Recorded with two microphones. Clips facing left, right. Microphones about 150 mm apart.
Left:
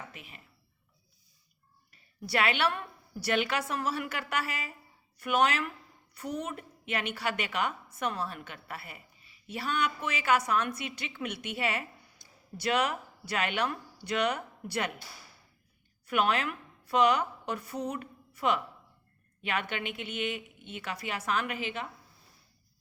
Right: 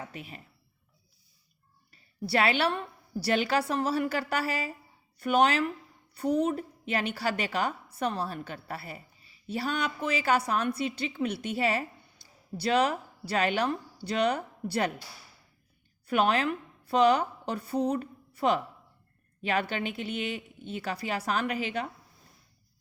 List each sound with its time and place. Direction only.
0.1 s speech: 35° right (ahead or behind)
1.9 s a woman's voice: 35° right (ahead or behind)
16.0 s a woman's voice: 35° right (ahead or behind)